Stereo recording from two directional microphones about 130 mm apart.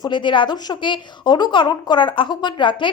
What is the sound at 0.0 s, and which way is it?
Speech, 35° left (ahead or behind).